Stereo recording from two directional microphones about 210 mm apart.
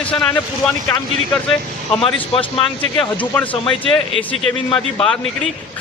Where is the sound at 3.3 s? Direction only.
10° left (ahead or behind).